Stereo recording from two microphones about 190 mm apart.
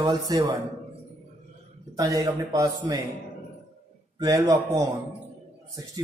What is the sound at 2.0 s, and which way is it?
A man's voice, 20° right (ahead or behind).